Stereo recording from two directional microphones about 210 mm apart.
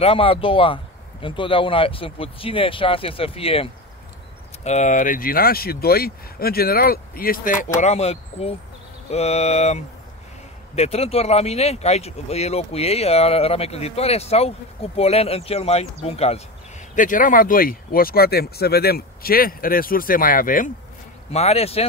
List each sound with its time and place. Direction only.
0.0 s speech: 25° left (ahead or behind)